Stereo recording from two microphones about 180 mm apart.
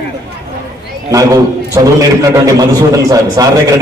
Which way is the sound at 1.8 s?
20° right (ahead or behind).